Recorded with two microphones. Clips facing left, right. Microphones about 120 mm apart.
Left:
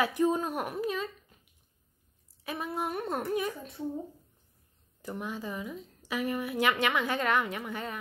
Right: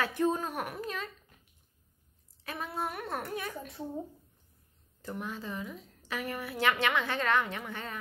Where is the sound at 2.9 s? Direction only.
30° left (ahead or behind).